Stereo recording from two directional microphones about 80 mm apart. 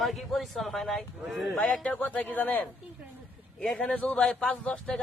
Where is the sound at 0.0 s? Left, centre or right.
Centre.